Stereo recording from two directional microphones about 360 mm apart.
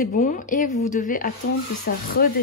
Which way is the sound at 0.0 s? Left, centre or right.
Centre.